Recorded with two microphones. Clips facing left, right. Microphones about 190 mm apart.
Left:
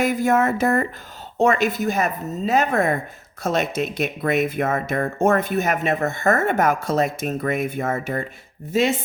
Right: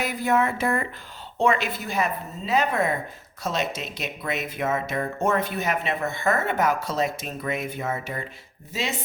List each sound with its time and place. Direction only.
0.0 s speech: 45° left (ahead or behind)